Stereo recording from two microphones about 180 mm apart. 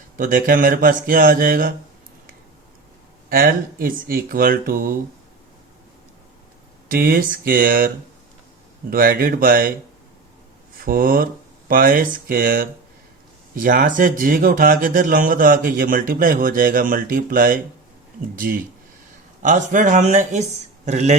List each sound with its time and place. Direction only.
0.2 s speech: 50° right (ahead or behind)
3.2 s speech: 55° right (ahead or behind)
6.9 s speech: 55° right (ahead or behind)
8.9 s speech: 55° right (ahead or behind)
10.8 s speech: 55° right (ahead or behind)